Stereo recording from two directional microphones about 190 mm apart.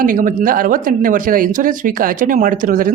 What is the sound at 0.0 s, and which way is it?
Speech, 45° right (ahead or behind).